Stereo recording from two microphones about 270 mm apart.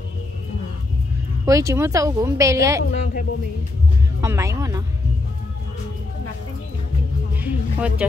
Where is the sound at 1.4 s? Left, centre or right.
Centre.